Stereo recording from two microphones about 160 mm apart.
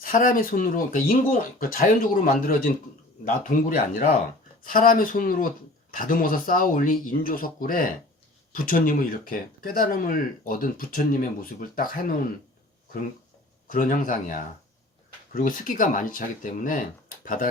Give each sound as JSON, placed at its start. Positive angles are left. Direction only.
{"t": 0.1, "sound": "speech", "side_deg": 60}
{"t": 13.7, "sound": "speech", "side_deg": 60}